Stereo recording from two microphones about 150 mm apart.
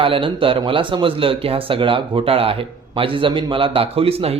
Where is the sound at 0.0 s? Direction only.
35° right (ahead or behind).